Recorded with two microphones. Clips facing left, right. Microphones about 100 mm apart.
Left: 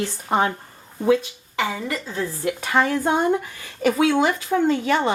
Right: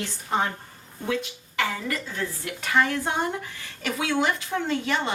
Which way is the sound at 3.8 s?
40° left (ahead or behind).